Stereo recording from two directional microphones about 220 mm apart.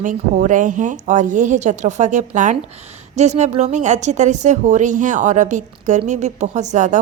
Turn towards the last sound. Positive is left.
turn(degrees=-35)  # may be behind; listen again after turning